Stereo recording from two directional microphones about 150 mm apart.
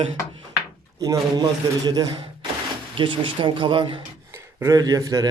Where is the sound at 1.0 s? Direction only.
25° right (ahead or behind).